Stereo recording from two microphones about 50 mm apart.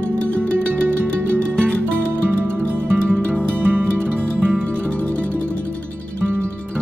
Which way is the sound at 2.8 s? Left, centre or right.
Right.